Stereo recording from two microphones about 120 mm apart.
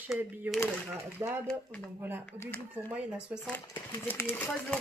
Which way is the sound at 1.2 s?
25° right (ahead or behind).